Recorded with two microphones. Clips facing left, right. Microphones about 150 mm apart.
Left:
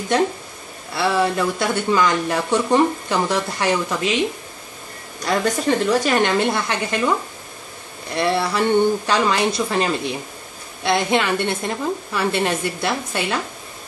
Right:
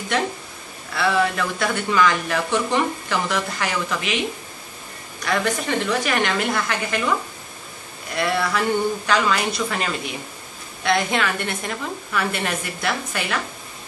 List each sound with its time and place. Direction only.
0.9 s speech: 30° left (ahead or behind)
5.2 s speech: 35° left (ahead or behind)
8.1 s speech: 25° left (ahead or behind)